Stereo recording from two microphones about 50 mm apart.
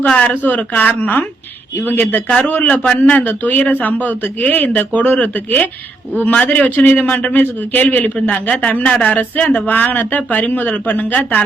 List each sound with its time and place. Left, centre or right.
0.2 s a man's voice: left